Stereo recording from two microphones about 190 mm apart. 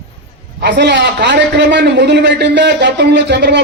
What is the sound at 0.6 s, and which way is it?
A man's voice, 60° right (ahead or behind).